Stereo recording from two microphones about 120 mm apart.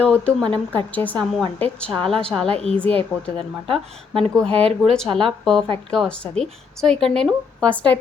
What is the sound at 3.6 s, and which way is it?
Speech, 50° right (ahead or behind).